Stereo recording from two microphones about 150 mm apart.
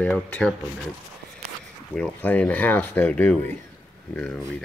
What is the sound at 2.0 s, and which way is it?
Speech, 10° left (ahead or behind).